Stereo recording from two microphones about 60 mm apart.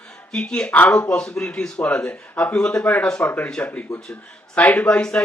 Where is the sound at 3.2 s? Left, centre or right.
Left.